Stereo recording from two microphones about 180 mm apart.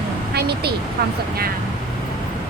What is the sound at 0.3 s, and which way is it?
Vehicle, 65° right (ahead or behind).